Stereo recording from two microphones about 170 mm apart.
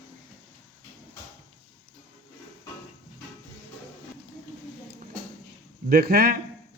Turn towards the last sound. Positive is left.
turn(degrees=-65)  # may be behind; listen again after turning